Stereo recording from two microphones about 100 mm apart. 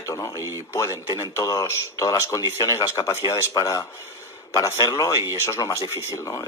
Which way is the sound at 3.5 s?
35° left (ahead or behind).